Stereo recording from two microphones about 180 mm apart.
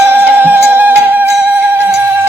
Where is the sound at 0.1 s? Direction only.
10° right (ahead or behind).